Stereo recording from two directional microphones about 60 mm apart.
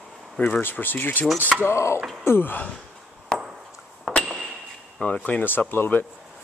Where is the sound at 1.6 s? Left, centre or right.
Left.